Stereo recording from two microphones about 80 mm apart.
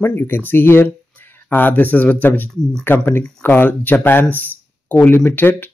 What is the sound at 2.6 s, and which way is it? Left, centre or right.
Speech, centre.